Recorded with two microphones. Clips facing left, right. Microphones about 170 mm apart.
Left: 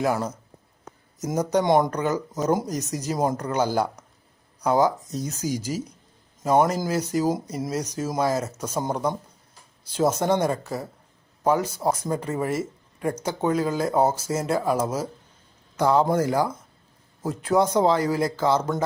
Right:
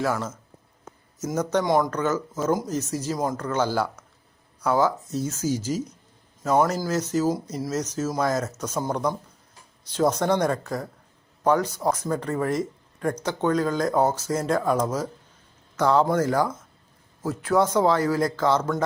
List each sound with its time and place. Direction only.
0.0 s speech: 15° left (ahead or behind)
1.4 s speech: 10° left (ahead or behind)
1.6 s speech: 25° left (ahead or behind)